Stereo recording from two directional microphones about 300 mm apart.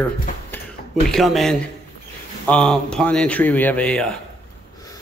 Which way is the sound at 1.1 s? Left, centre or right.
Centre.